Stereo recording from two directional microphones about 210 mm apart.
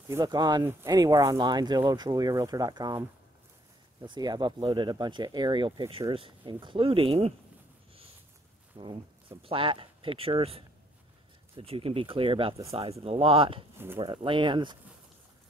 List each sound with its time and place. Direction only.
0.1 s speech: 20° right (ahead or behind)
8.8 s speech: 25° right (ahead or behind)